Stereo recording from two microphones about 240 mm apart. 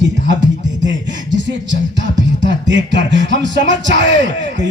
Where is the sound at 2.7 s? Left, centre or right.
Right.